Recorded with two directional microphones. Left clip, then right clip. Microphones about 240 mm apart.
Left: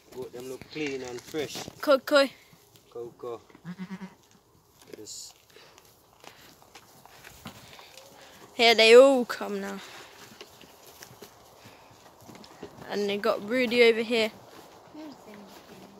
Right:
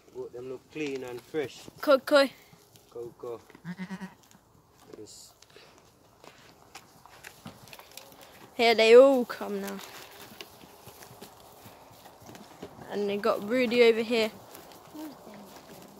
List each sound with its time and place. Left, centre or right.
0.2 s a sound: left
0.5 s speech: left
1.8 s speech: centre
2.9 s speech: left
3.6 s goat: centre
5.0 s speech: centre
7.4 s run: left
8.5 s speech: centre
12.9 s speech: centre